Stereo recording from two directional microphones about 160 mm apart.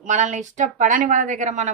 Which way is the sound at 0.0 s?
50° right (ahead or behind).